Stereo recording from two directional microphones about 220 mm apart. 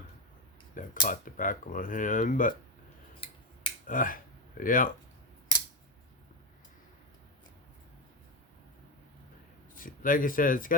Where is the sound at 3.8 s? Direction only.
40° left (ahead or behind).